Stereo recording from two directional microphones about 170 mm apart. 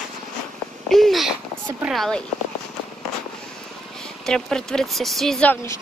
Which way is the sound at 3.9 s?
5° left (ahead or behind).